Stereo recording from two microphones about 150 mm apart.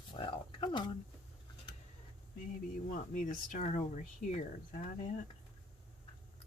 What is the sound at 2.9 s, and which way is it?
Speech, 60° left (ahead or behind).